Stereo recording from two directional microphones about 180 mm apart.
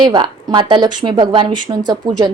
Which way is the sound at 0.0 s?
25° right (ahead or behind).